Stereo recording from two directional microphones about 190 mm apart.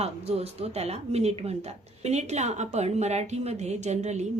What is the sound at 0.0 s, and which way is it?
Speech, 35° right (ahead or behind).